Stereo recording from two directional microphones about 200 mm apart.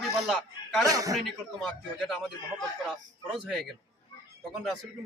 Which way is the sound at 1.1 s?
Centre (ahead or behind).